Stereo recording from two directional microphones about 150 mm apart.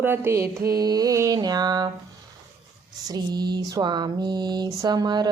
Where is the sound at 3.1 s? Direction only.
25° right (ahead or behind).